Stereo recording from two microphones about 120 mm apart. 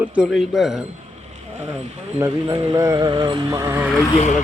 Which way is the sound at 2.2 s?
30° right (ahead or behind).